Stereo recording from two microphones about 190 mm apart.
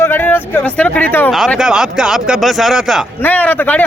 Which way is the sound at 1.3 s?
Centre (ahead or behind).